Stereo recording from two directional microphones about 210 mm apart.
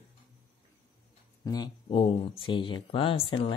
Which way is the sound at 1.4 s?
20° left (ahead or behind).